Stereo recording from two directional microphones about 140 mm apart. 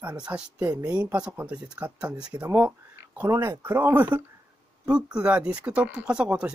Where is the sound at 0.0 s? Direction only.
10° right (ahead or behind).